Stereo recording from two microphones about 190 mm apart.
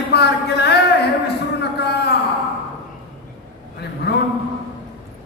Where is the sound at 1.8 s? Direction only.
60° left (ahead or behind).